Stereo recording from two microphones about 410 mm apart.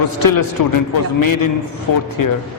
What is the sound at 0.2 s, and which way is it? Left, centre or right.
A man's voice, left.